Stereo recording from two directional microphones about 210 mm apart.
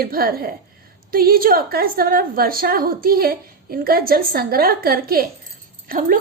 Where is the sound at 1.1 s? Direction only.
45° right (ahead or behind).